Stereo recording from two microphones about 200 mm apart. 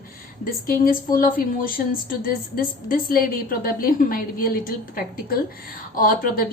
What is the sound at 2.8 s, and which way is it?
A woman's voice, 45° left (ahead or behind).